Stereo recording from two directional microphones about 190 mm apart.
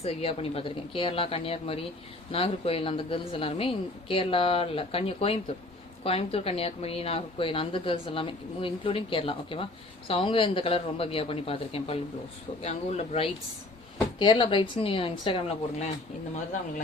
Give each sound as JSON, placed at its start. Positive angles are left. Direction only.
{"t": 0.0, "sound": "speech", "side_deg": 30}